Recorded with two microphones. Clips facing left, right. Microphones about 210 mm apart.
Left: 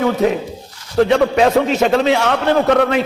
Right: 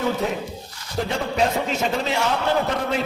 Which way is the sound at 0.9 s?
70° left (ahead or behind).